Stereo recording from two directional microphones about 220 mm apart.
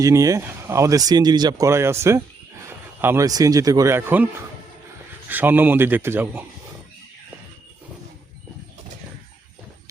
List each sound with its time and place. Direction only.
0.0 s speech: 15° right (ahead or behind)
5.3 s speech: 10° right (ahead or behind)